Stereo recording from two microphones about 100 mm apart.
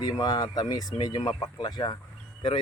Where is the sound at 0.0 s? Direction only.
40° left (ahead or behind).